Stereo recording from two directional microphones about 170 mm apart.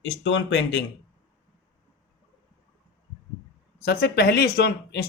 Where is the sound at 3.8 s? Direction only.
75° left (ahead or behind).